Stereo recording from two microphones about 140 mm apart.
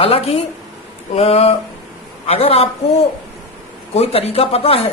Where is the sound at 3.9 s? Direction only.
45° left (ahead or behind).